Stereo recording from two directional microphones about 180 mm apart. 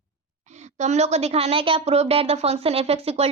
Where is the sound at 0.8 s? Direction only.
40° right (ahead or behind).